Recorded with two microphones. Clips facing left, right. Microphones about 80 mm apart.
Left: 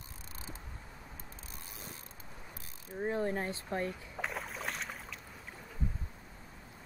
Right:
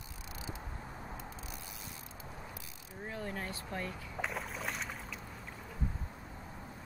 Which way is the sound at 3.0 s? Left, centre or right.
Left.